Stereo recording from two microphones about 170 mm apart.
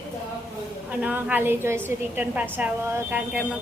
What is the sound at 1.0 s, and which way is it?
A woman's voice, 10° right (ahead or behind).